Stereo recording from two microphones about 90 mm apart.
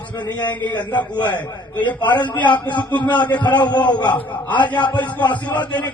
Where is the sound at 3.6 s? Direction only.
55° left (ahead or behind).